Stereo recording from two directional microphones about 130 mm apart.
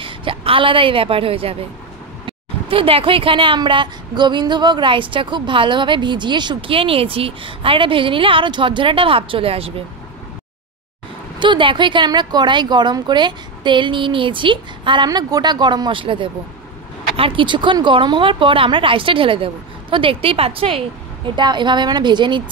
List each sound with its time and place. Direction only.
0.0 s a woman's voice: 40° right (ahead or behind)
11.3 s speech: 40° right (ahead or behind)